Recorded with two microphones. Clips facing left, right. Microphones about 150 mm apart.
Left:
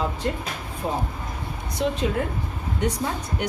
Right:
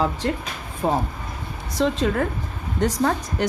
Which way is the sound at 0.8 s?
60° right (ahead or behind).